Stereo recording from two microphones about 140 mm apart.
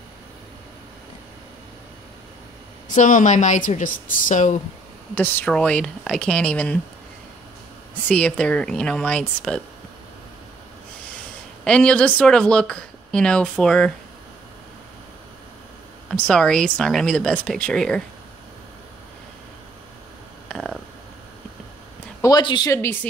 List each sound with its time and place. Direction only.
2.9 s a woman's voice: 65° left (ahead or behind)
5.1 s speech: 15° left (ahead or behind)
8.1 s speech: 5° left (ahead or behind)
11.6 s speech: 5° left (ahead or behind)
16.1 s speech: 5° left (ahead or behind)
20.4 s a sound: centre (ahead or behind)
22.2 s speech: 30° left (ahead or behind)
22.7 s speech: 20° left (ahead or behind)